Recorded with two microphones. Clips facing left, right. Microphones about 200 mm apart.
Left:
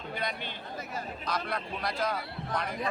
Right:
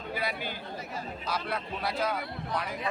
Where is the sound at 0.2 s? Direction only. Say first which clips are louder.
Right 2 dB; 5° right (ahead or behind).